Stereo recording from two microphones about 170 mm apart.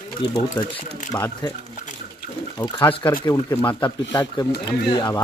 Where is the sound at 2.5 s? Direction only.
25° left (ahead or behind).